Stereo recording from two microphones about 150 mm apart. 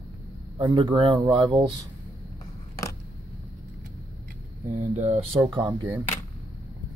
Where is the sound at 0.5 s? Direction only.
35° right (ahead or behind).